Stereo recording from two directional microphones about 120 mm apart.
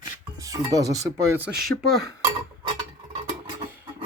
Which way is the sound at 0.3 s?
30° right (ahead or behind).